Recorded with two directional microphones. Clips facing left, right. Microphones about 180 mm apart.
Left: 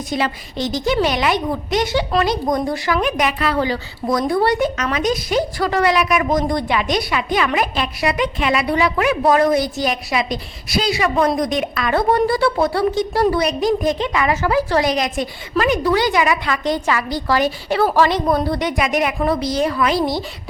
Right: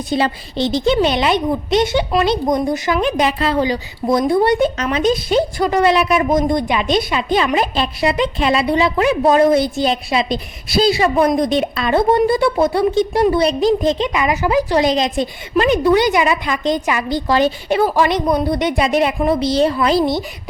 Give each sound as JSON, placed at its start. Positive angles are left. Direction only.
{"t": 0.1, "sound": "a woman's voice", "side_deg": -30}